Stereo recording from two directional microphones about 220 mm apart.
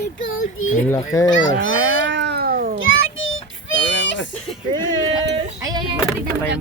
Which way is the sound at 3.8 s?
55° left (ahead or behind).